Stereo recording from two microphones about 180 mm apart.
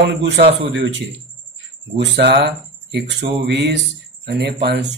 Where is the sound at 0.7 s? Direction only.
85° right.